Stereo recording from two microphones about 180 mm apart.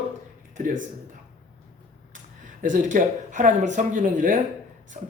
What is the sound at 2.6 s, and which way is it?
Speech, 45° right (ahead or behind).